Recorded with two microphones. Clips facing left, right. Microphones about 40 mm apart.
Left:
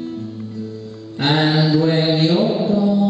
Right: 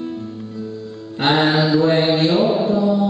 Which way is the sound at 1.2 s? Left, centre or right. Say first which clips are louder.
Right 1 dB; centre.